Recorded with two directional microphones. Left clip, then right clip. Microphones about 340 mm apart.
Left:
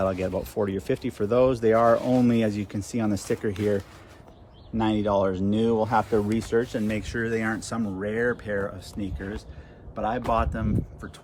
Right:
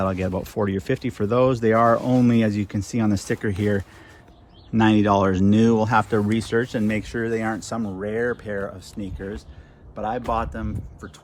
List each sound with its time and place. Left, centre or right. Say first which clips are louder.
0.0 s speech: right 1 dB; right; by 11.1 s centre